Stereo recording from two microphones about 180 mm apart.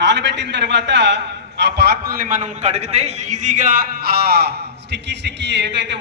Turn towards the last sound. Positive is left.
turn(degrees=-80)